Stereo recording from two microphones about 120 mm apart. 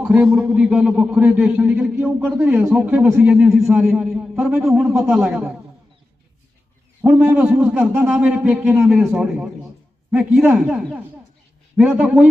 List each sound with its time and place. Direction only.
0.1 s a man's voice: 10° right (ahead or behind)
7.0 s a man's voice: 10° right (ahead or behind)